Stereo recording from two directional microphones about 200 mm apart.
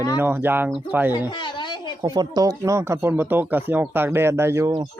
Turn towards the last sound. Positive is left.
turn(degrees=-15)  # may be behind; listen again after turning